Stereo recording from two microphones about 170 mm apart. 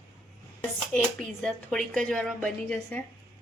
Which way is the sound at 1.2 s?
Centre (ahead or behind).